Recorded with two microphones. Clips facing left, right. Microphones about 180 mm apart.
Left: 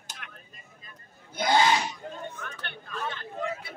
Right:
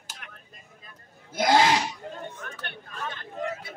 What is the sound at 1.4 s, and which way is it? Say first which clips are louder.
Speech: right 2 dB; 90° right.